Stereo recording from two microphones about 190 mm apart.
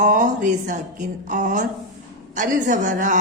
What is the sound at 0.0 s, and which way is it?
A woman's voice, 40° right (ahead or behind).